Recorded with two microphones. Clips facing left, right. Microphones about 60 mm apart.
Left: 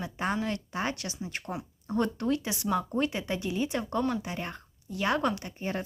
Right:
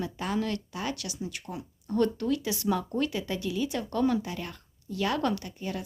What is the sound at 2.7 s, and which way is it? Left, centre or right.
Speech, centre.